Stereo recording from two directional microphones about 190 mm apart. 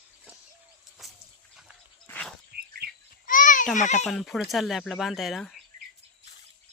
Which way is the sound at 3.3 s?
45° left (ahead or behind).